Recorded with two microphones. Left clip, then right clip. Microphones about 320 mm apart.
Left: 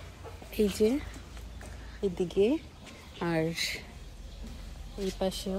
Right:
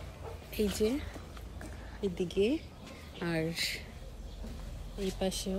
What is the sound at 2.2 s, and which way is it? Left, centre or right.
Speech, centre.